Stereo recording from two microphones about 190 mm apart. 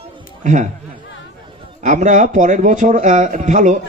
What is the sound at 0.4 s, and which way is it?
Speech, 40° right (ahead or behind).